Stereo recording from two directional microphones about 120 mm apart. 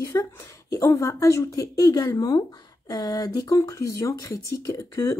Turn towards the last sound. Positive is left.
turn(degrees=25)  # may be behind; listen again after turning